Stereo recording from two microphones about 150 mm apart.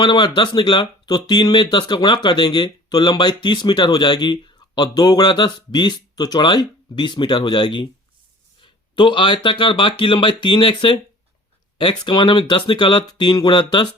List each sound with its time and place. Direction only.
0.0 s speech: 30° left (ahead or behind)